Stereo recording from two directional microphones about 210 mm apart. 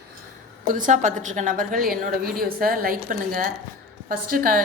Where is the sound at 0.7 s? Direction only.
40° right (ahead or behind).